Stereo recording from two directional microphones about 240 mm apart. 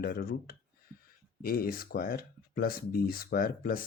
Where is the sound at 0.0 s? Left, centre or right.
Left.